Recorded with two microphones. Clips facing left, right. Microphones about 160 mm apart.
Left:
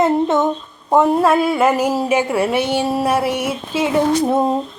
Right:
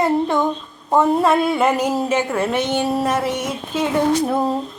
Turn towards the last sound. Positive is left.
turn(degrees=25)  # may be behind; listen again after turning